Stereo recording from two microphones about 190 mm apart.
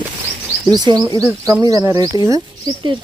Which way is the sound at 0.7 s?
20° right (ahead or behind).